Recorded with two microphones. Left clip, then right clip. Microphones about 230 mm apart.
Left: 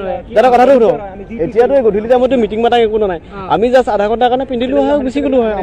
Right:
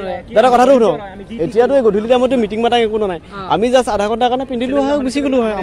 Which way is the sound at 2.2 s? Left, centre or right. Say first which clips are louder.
Left 3 dB; right.